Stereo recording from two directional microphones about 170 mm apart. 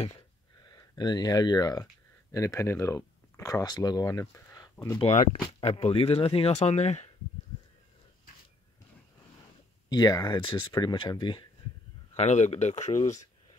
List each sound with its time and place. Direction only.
0.7 s speech: 25° left (ahead or behind)
5.0 s speech: 40° left (ahead or behind)
9.8 s speech: 25° left (ahead or behind)
12.2 s speech: 40° left (ahead or behind)